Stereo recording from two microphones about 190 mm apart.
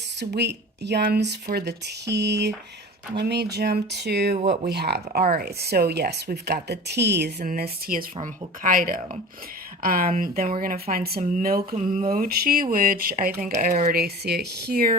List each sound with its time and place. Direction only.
0.2 s speech: 65° right (ahead or behind)